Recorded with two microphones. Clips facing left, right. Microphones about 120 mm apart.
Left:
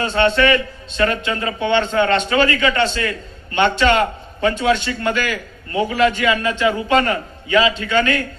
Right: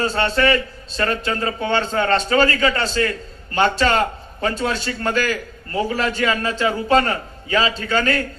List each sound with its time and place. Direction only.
0.0 s a man's voice: 35° right (ahead or behind)